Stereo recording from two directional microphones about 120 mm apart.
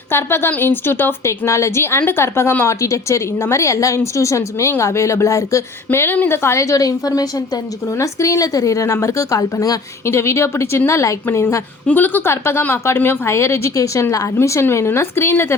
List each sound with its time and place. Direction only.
0.1 s a woman's voice: 20° left (ahead or behind)